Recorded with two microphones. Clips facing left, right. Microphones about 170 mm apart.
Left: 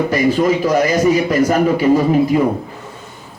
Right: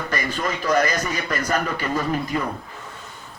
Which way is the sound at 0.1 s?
10° left (ahead or behind).